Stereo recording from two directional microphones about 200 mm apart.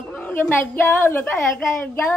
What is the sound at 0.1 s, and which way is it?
A woman's voice, 10° left (ahead or behind).